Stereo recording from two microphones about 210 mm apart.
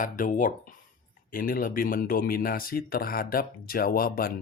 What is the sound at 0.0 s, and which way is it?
Speech, 40° left (ahead or behind).